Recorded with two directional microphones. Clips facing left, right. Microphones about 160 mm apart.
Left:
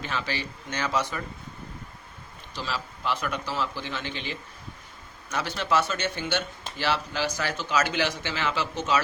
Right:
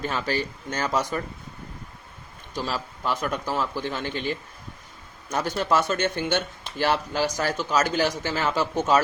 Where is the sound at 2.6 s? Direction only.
45° right (ahead or behind).